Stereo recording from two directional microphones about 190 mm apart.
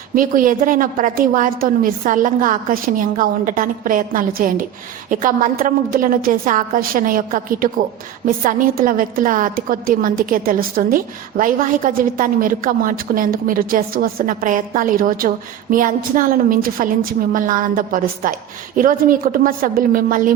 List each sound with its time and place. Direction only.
0.2 s a woman's voice: 45° right (ahead or behind)